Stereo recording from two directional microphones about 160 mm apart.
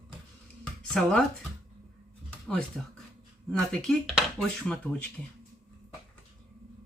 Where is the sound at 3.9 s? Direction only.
Centre (ahead or behind).